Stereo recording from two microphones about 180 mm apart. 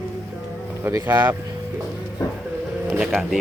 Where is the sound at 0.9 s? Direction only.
15° right (ahead or behind).